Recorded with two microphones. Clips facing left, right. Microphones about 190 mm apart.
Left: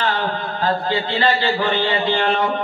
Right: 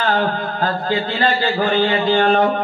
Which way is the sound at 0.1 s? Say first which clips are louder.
Right 4 dB; 45° right (ahead or behind).